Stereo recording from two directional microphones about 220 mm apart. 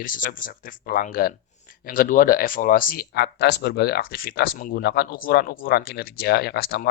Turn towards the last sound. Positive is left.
turn(degrees=45)  # may be behind; listen again after turning